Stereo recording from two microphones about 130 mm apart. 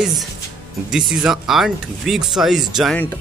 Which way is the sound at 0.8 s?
5° right (ahead or behind).